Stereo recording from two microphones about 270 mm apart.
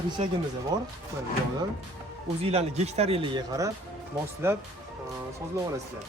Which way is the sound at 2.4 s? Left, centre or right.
Right.